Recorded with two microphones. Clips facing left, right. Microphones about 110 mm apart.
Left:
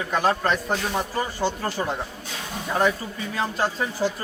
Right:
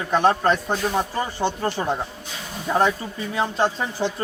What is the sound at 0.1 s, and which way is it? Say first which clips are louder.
Speech: right 4 dB; 30° right (ahead or behind).